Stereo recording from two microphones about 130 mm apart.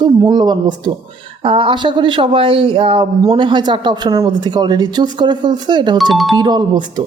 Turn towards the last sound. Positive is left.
turn(degrees=-35)  # may be behind; listen again after turning